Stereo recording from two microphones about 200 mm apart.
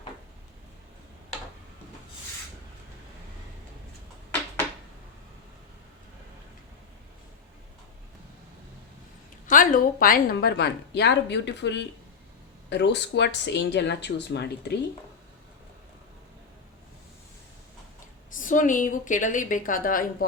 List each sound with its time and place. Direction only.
9.5 s a woman's voice: 40° left (ahead or behind)
18.3 s a woman's voice: 40° left (ahead or behind)